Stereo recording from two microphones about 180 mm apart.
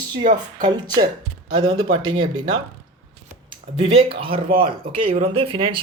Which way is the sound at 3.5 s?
30° right (ahead or behind).